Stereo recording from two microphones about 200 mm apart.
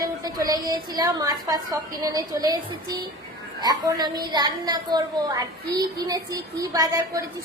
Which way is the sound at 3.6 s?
20° right (ahead or behind).